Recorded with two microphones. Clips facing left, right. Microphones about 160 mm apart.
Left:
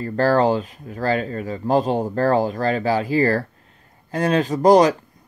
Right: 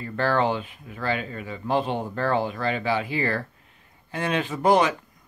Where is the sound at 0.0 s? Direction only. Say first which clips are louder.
Left 6 dB; 40° left (ahead or behind).